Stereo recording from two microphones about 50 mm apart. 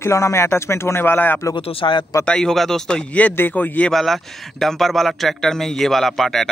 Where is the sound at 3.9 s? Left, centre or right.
Centre.